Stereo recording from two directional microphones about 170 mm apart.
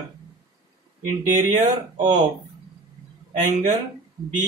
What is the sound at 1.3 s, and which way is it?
Speech, 45° right (ahead or behind).